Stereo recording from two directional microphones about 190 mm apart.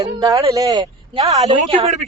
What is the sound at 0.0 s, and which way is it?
Speech, 20° right (ahead or behind).